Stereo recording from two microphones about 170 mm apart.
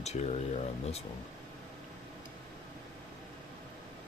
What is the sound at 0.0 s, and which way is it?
Speech, 40° left (ahead or behind).